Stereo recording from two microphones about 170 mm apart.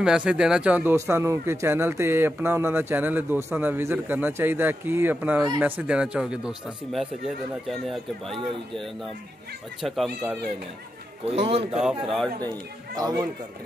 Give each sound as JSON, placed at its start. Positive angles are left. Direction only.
{"t": 0.0, "sound": "speech", "side_deg": -5}
{"t": 11.3, "sound": "a man's voice", "side_deg": -35}
{"t": 11.8, "sound": "speech", "side_deg": 0}
{"t": 12.4, "sound": "speech", "side_deg": -25}